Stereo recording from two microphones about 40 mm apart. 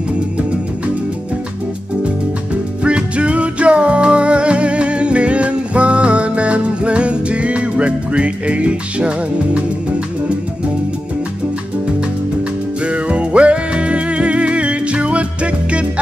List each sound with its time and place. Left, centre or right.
2.8 s music: right
12.8 s music: right